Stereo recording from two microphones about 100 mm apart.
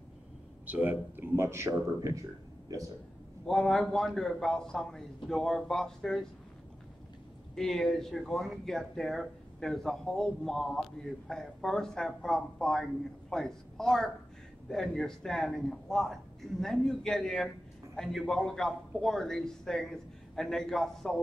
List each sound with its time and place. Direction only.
0.7 s speech: 15° right (ahead or behind); by 2.2 s 35° right (ahead or behind)
3.4 s speech: 5° left (ahead or behind)
7.5 s speech: 5° left (ahead or behind)